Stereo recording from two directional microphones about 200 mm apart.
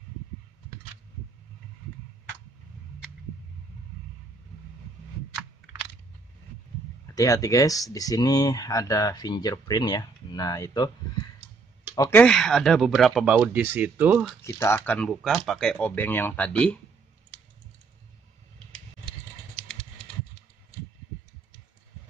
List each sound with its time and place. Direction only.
7.1 s speech: 15° left (ahead or behind)
11.9 s speech: 15° left (ahead or behind); by 14.4 s 5° right (ahead or behind)
14.4 s speech: 15° left (ahead or behind)